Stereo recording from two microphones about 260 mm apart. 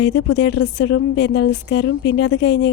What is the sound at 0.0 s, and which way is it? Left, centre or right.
A woman's voice, left.